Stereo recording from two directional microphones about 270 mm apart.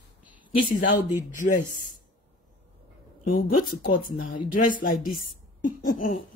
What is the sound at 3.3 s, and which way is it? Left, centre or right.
Speech, left.